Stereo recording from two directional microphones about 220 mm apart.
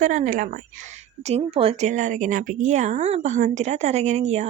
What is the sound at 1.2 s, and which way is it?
Speech, 25° right (ahead or behind).